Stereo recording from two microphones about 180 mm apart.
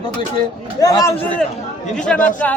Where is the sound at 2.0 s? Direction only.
10° left (ahead or behind).